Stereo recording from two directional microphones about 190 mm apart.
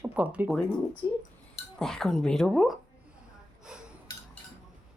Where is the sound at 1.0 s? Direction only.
20° left (ahead or behind).